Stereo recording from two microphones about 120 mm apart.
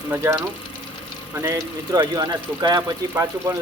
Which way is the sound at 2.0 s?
35° right (ahead or behind).